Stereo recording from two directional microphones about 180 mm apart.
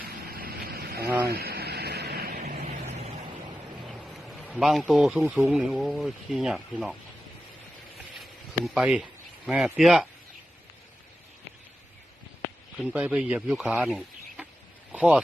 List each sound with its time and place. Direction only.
0.0 s a sound: 55° right (ahead or behind)
2.6 s vehicle: 35° right (ahead or behind)
3.8 s a man's voice: centre (ahead or behind)
8.2 s a sound: centre (ahead or behind)
9.5 s speech: 5° right (ahead or behind)
12.8 s speech: 10° right (ahead or behind)